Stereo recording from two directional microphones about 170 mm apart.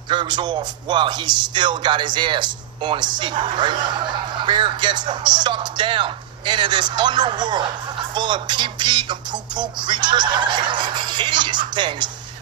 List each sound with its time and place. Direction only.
0.1 s speech: 25° right (ahead or behind)